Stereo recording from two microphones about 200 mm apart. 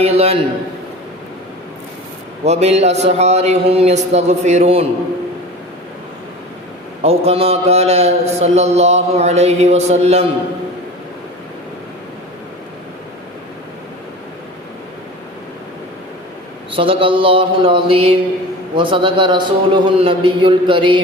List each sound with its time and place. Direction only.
0.0 s a man's voice: 30° right (ahead or behind)
2.4 s mantra: 35° right (ahead or behind)
7.0 s mantra: 30° right (ahead or behind)
16.7 s a man's voice: 25° right (ahead or behind)